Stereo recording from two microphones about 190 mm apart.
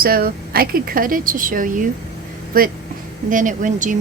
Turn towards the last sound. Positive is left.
turn(degrees=-40)  # may be behind; listen again after turning